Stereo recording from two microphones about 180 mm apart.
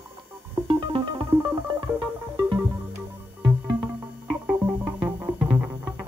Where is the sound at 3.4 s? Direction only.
5° right (ahead or behind).